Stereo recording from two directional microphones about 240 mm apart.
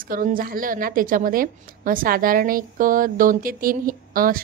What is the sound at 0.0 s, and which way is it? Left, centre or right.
A woman's voice, right.